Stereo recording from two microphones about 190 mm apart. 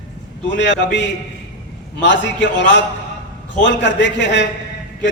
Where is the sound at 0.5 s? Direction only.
70° left (ahead or behind).